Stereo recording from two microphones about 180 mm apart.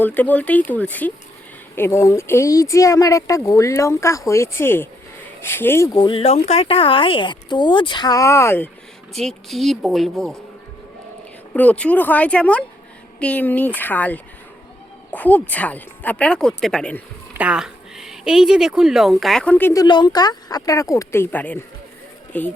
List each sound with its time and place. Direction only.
0.0 s speech: 10° left (ahead or behind)
9.1 s speech: centre (ahead or behind)
11.5 s speech: 10° left (ahead or behind)
17.3 s speech: 5° right (ahead or behind); by 22.5 s 10° left (ahead or behind)